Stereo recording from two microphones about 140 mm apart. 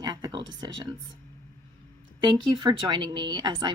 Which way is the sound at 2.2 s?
35° right (ahead or behind).